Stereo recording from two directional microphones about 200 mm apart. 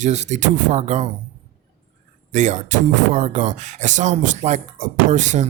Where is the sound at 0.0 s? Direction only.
35° right (ahead or behind).